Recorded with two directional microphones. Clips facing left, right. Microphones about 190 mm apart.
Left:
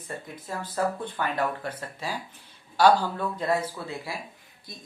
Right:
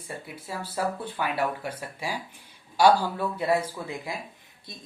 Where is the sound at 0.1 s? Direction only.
10° right (ahead or behind).